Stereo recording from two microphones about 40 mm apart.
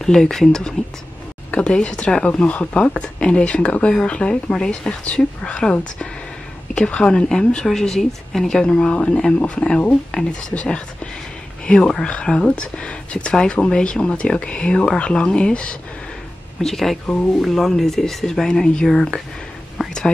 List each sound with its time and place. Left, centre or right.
0.0 s speech: centre
1.5 s speech: left
10.1 s speech: left
11.6 s speech: left
12.5 s speech: left
16.6 s speech: centre
19.8 s whispering: centre